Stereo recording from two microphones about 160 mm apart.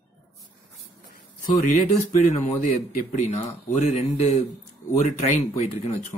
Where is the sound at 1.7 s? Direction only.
50° left (ahead or behind).